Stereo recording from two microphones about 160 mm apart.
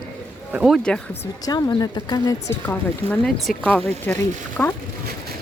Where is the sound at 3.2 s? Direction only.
5° left (ahead or behind).